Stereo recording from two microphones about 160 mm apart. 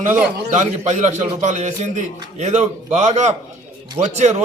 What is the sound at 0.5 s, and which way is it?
A man's voice, 50° right (ahead or behind).